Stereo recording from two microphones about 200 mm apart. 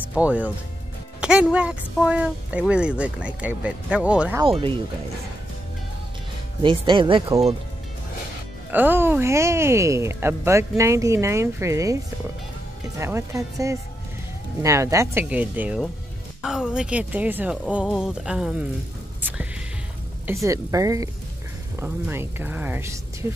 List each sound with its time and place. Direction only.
0.1 s speech: 5° right (ahead or behind)
4.4 s speech: 25° right (ahead or behind)
6.6 s speech: 25° right (ahead or behind)
8.7 s speech: 10° right (ahead or behind)
13.0 s speech: 15° right (ahead or behind)
20.2 s speech: 15° right (ahead or behind)